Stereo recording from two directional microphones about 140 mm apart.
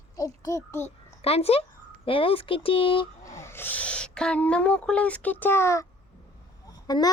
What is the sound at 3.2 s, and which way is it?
A child's voice, 20° left (ahead or behind).